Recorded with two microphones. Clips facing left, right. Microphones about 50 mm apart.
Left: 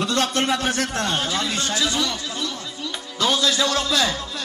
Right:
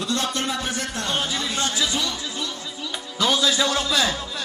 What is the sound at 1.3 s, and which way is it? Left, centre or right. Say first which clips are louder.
Speech: left 2 dB; left.